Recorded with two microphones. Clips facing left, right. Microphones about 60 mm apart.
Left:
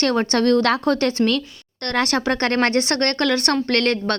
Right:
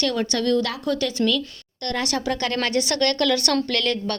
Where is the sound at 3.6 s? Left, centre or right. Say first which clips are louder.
Left 5 dB; left.